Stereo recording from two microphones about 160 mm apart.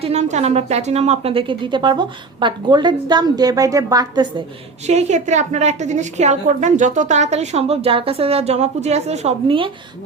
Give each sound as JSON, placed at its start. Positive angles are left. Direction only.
{"t": 0.0, "sound": "a woman's voice", "side_deg": -45}
{"t": 4.9, "sound": "a woman's voice", "side_deg": -45}